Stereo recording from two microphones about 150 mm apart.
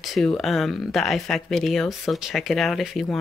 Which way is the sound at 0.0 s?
Centre (ahead or behind).